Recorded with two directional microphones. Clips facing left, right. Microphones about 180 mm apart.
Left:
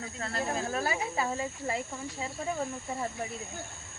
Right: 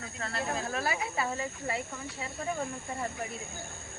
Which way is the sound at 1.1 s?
20° left (ahead or behind).